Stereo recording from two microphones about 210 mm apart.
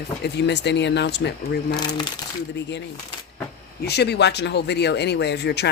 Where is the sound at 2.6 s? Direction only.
55° left (ahead or behind).